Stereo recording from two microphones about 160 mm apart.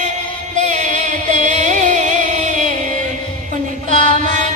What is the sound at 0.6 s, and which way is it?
Chant, 45° right (ahead or behind).